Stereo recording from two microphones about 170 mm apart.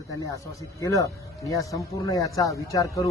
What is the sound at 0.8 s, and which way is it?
A man's voice, 20° left (ahead or behind).